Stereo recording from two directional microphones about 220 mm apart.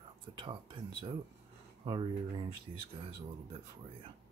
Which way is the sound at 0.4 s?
20° right (ahead or behind).